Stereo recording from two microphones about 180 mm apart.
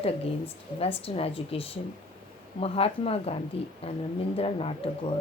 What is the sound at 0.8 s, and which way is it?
Speech, 35° left (ahead or behind).